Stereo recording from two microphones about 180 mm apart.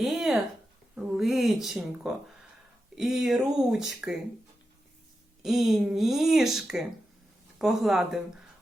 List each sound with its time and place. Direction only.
0.0 s a sound: centre (ahead or behind)
0.9 s speech: 5° right (ahead or behind)
5.4 s speech: centre (ahead or behind)